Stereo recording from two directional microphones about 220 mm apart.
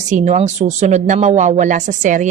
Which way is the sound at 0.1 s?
35° right (ahead or behind).